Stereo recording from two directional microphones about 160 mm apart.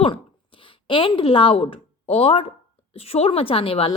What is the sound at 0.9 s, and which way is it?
A woman's voice, 30° left (ahead or behind).